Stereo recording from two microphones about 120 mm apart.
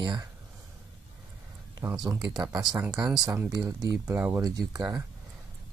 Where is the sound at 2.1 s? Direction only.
25° right (ahead or behind).